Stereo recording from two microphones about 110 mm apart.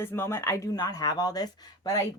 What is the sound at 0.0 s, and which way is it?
Speech, 20° left (ahead or behind).